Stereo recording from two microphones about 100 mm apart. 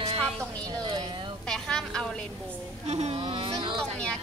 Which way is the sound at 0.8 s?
55° right (ahead or behind).